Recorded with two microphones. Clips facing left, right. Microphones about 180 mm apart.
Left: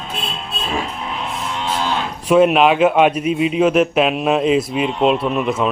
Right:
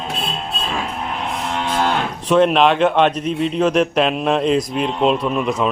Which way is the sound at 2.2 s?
5° left (ahead or behind).